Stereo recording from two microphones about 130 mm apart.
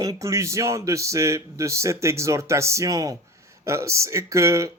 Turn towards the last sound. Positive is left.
turn(degrees=-25)  # may be behind; listen again after turning